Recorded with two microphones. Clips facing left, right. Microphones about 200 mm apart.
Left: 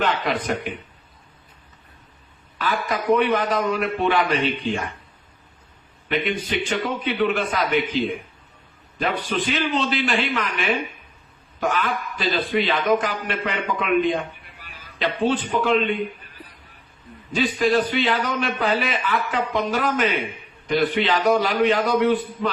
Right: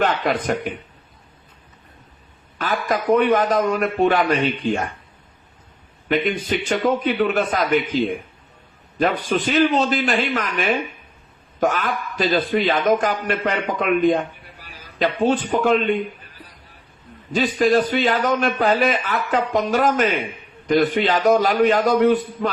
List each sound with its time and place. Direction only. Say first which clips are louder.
0.0 s speech: right 3 dB; 45° right (ahead or behind)
2.6 s speech: right 2 dB; 45° right (ahead or behind)
6.4 s speech: right 4 dB; 45° right (ahead or behind)